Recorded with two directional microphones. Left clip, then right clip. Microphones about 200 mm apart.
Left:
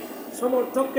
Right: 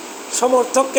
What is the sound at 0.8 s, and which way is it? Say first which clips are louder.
Speech: right 8 dB; 5° right (ahead or behind).